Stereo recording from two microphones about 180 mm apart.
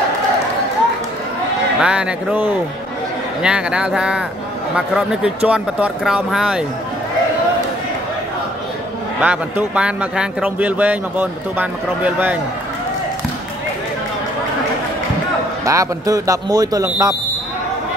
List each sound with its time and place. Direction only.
1.8 s speech: 5° right (ahead or behind)
9.2 s speech: 10° right (ahead or behind)
15.6 s speech: 15° right (ahead or behind)